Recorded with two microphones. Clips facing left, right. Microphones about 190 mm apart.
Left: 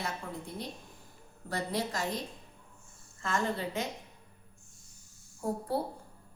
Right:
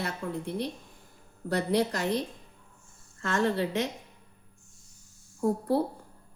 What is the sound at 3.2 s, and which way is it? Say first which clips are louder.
Speech: right 5 dB; 80° right.